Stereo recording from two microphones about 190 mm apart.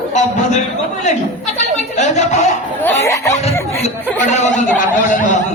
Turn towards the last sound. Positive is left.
turn(degrees=40)  # may be behind; listen again after turning